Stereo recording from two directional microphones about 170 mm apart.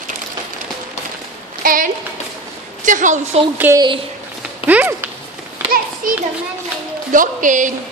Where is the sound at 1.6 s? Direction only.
55° right (ahead or behind).